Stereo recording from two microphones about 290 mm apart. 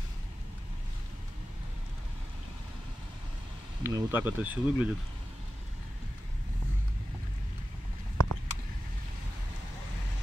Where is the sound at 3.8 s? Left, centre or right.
Centre.